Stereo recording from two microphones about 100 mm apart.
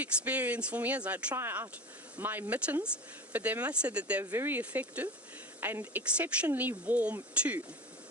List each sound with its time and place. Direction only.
0.0 s speech: 15° right (ahead or behind)
1.4 s speech: 25° right (ahead or behind)